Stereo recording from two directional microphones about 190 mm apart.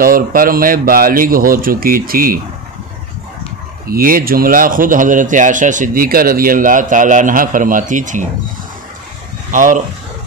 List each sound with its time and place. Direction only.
0.0 s speech: 50° right (ahead or behind)
3.8 s speech: 50° right (ahead or behind)
9.5 s speech: 45° right (ahead or behind)